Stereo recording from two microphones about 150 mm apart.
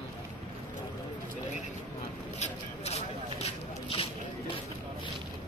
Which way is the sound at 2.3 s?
45° left (ahead or behind).